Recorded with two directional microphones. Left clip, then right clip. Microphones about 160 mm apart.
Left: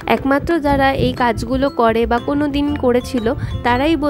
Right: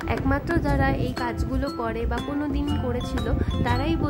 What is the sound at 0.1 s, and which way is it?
Speech, 45° left (ahead or behind).